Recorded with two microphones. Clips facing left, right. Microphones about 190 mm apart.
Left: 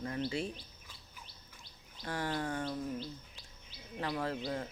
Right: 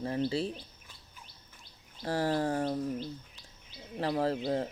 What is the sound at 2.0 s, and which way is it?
Speech, 35° right (ahead or behind).